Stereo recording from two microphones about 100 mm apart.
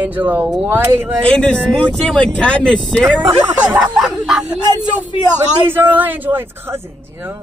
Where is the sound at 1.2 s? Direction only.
10° left (ahead or behind).